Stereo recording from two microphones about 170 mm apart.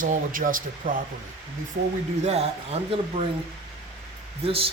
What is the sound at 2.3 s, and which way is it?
Speech, 35° right (ahead or behind).